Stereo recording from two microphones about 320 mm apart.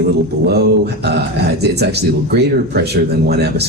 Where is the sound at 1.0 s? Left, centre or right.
Right.